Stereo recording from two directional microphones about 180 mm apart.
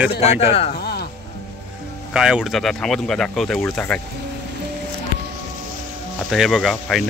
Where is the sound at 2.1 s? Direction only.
5° right (ahead or behind).